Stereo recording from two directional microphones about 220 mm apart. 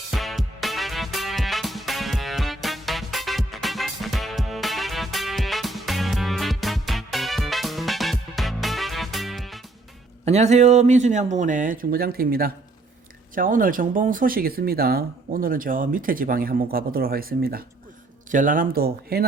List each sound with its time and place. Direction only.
0.1 s music: centre (ahead or behind)
10.2 s speech: 30° right (ahead or behind)